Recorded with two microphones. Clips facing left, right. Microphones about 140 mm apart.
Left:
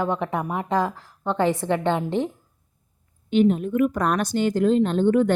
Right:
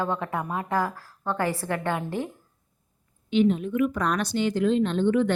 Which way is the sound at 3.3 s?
45° left (ahead or behind).